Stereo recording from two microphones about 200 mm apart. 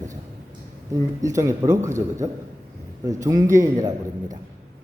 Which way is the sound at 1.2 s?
15° right (ahead or behind).